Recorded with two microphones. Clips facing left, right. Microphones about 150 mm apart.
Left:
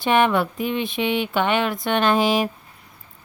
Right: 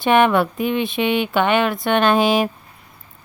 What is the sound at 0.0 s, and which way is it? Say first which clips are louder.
Speech: right 3 dB; 60° right (ahead or behind).